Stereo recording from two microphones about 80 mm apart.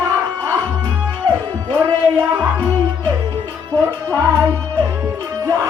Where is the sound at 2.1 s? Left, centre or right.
Right.